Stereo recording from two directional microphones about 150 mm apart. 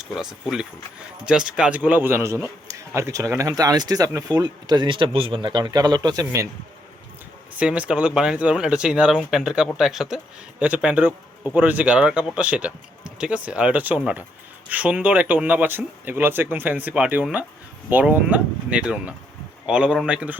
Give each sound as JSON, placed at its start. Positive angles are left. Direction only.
{"t": 0.0, "sound": "a man's voice", "side_deg": -5}
{"t": 7.6, "sound": "speech", "side_deg": -5}